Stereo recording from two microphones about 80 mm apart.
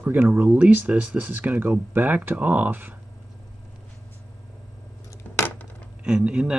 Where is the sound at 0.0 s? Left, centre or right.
Right.